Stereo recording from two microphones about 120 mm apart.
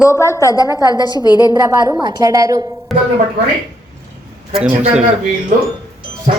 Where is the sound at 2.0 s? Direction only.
30° right (ahead or behind).